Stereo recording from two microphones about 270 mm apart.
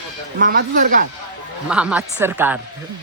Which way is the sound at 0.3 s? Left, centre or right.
Right.